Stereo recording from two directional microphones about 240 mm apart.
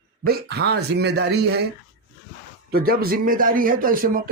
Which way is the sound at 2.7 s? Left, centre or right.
Right.